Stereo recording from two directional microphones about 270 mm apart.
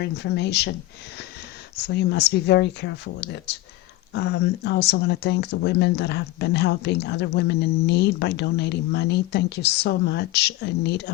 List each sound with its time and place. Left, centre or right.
0.0 s speech: left
1.9 s speech: left